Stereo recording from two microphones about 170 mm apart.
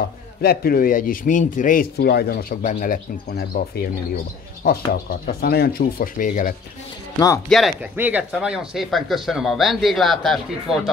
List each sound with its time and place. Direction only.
0.4 s speech: 60° left (ahead or behind)
7.4 s speech: centre (ahead or behind)